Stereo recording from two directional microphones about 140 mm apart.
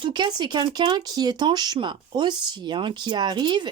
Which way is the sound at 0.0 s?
30° right (ahead or behind).